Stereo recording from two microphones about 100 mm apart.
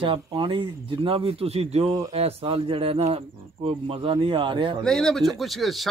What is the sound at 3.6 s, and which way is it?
Speech, 65° right (ahead or behind).